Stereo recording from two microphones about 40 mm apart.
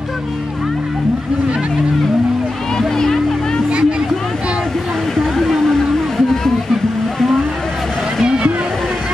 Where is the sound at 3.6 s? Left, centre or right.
Right.